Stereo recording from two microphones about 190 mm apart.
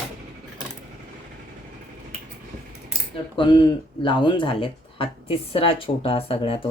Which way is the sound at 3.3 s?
25° left (ahead or behind).